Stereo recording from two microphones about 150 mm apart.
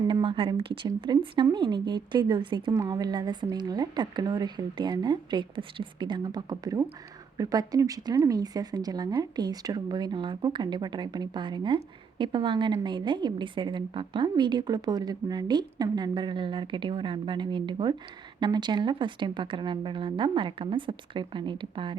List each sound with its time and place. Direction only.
0.1 s speech: 35° right (ahead or behind)